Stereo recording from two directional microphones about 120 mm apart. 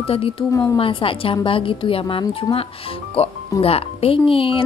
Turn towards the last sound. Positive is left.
turn(degrees=50)  # may be behind; listen again after turning